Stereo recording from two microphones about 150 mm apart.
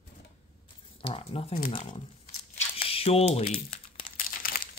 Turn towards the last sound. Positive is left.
turn(degrees=75)  # may be behind; listen again after turning